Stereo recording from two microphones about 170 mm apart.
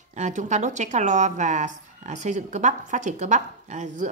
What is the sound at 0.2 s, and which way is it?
A woman's voice, 45° right (ahead or behind).